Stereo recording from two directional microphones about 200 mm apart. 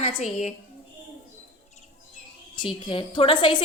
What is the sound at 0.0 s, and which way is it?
Speech, 30° left (ahead or behind).